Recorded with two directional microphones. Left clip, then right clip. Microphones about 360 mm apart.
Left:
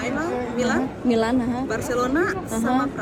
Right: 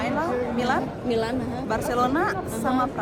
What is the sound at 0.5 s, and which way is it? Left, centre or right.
Speech, centre.